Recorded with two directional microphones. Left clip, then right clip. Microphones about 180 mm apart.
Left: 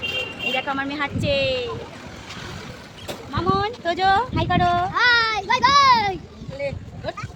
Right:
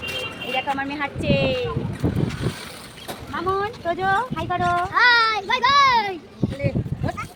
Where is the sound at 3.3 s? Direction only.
25° left (ahead or behind).